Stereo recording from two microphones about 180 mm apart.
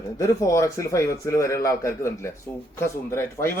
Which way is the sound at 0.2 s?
15° left (ahead or behind).